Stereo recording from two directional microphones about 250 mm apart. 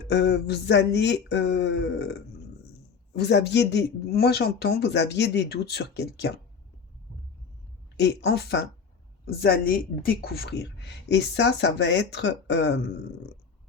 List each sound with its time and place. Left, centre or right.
0.1 s a woman's voice: left
7.9 s a woman's voice: left